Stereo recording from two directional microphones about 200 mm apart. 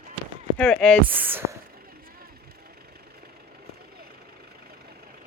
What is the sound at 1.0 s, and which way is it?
Speech, 10° right (ahead or behind).